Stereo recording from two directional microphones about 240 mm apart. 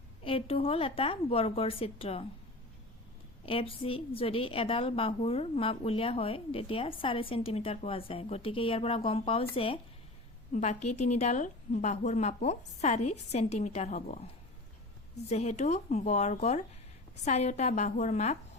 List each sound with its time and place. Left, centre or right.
0.3 s a woman's voice: left
3.4 s a woman's voice: left
15.3 s a woman's voice: left